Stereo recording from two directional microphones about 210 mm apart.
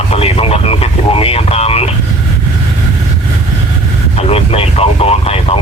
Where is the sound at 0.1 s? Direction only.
30° left (ahead or behind).